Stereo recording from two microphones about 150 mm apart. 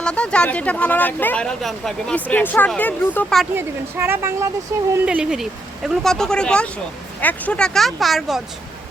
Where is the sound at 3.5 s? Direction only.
15° right (ahead or behind).